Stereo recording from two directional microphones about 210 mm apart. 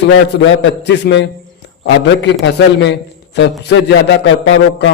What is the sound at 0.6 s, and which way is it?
Speech, 55° left (ahead or behind).